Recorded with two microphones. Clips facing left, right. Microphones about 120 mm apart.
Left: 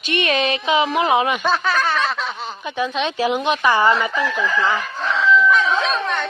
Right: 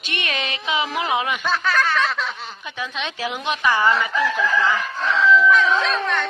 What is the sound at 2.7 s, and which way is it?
A woman's voice, 30° left (ahead or behind).